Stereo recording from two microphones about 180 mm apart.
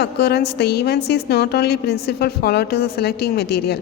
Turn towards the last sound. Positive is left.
turn(degrees=65)  # may be behind; listen again after turning